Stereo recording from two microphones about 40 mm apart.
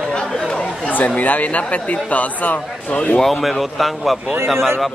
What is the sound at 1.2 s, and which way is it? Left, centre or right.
A man's voice, left.